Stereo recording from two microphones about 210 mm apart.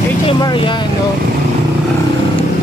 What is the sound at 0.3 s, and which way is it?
Speech, 20° left (ahead or behind).